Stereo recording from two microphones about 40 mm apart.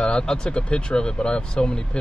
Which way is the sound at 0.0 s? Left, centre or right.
Left.